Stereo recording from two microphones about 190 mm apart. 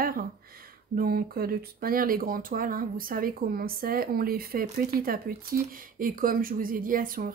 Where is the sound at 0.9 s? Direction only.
50° right (ahead or behind).